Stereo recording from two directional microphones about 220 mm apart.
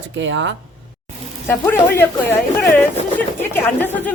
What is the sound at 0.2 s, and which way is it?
Speech, 55° right (ahead or behind).